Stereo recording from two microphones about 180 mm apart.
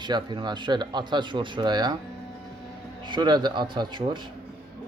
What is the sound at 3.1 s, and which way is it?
Speech, 25° right (ahead or behind).